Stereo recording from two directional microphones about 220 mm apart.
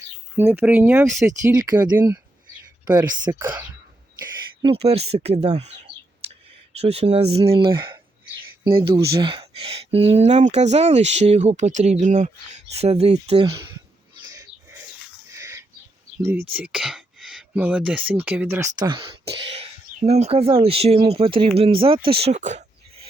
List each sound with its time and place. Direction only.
0.3 s speech: 10° right (ahead or behind)
4.2 s bird: 25° right (ahead or behind)
6.7 s speech: 30° right (ahead or behind)
9.2 s speech: 25° right (ahead or behind)
15.3 s a sound: 15° right (ahead or behind)
16.5 s speech: 5° right (ahead or behind)
18.8 s speech: 20° right (ahead or behind)